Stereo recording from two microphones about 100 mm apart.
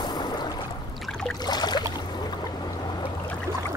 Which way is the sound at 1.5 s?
45° left (ahead or behind).